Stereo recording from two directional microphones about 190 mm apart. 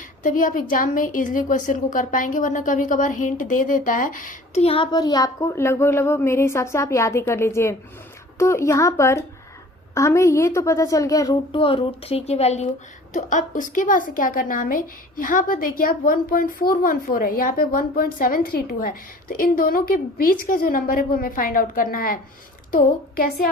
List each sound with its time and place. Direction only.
0.2 s a woman's voice: 45° left (ahead or behind)